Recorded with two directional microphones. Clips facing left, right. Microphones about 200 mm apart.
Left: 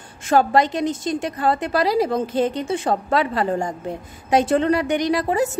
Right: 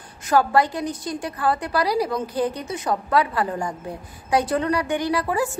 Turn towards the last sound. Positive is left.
turn(degrees=20)  # may be behind; listen again after turning